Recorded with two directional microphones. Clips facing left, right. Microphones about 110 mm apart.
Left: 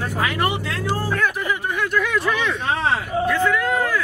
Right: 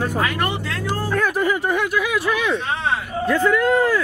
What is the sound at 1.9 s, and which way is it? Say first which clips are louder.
Speech: even; 5° right (ahead or behind).